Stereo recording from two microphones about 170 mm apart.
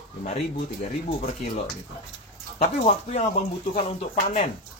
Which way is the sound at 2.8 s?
35° left (ahead or behind).